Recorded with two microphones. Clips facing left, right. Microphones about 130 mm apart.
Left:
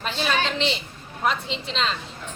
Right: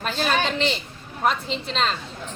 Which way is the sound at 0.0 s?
45° right (ahead or behind).